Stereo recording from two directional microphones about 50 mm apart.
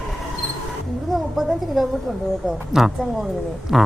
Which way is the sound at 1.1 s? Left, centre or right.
Centre.